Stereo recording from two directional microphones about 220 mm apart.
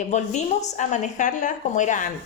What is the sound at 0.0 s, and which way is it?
A woman's voice, 30° left (ahead or behind).